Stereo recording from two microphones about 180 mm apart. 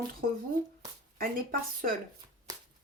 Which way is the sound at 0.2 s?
55° right (ahead or behind).